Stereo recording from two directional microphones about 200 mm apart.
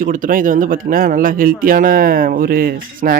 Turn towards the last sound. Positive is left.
turn(degrees=-45)  # may be behind; listen again after turning